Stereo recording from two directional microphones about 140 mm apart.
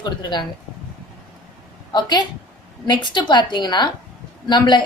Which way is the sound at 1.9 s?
30° left (ahead or behind).